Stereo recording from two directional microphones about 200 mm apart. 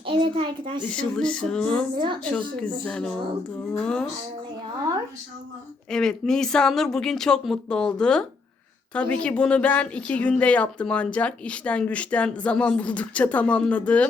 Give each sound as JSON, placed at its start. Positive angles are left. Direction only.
{"t": 0.0, "sound": "a child's voice", "side_deg": -25}
{"t": 0.9, "sound": "speech", "side_deg": 5}
{"t": 5.9, "sound": "a woman's voice", "side_deg": 5}